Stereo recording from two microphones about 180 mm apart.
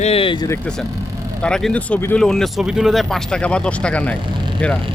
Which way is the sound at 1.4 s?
5° left (ahead or behind).